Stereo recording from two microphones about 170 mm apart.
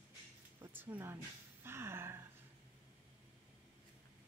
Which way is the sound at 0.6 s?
10° right (ahead or behind).